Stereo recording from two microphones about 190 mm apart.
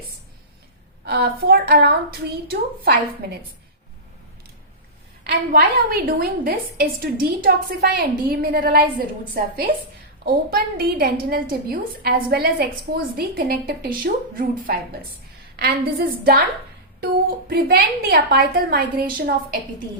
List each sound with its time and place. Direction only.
1.0 s a woman's voice: 55° right (ahead or behind)
5.3 s a woman's voice: 50° right (ahead or behind)
10.2 s a woman's voice: 55° right (ahead or behind)
17.5 s a woman's voice: 50° right (ahead or behind)